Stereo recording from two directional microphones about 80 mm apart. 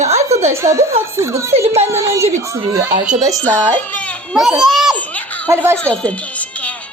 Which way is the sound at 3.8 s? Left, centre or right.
Centre.